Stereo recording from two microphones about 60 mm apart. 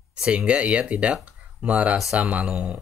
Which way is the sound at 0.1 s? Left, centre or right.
Centre.